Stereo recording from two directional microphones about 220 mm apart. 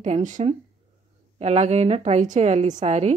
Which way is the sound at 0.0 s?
35° right (ahead or behind).